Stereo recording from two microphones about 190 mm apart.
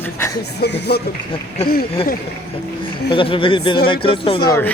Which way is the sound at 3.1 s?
25° left (ahead or behind).